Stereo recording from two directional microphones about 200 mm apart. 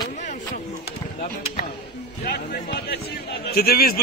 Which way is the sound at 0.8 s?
50° left (ahead or behind).